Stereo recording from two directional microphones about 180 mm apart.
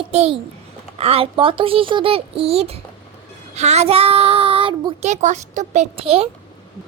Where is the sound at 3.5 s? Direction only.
40° right (ahead or behind).